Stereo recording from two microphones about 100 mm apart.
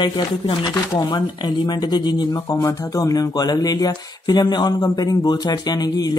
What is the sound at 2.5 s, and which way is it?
Speech, 35° left (ahead or behind).